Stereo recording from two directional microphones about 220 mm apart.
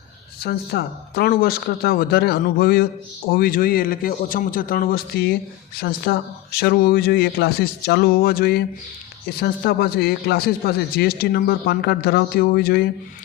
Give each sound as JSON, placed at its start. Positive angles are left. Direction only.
{"t": 0.3, "sound": "a man's voice", "side_deg": 45}